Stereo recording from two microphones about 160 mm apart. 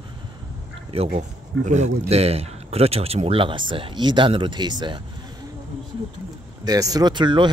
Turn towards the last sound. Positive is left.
turn(degrees=-30)  # may be behind; listen again after turning